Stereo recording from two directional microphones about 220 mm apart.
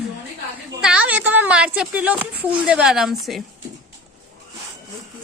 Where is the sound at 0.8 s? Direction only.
5° right (ahead or behind).